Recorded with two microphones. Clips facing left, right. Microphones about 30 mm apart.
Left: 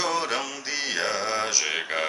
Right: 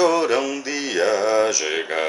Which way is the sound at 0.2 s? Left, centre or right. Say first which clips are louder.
Right 8 dB; centre.